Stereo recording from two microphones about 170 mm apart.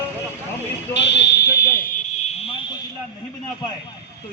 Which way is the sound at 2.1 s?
40° left (ahead or behind).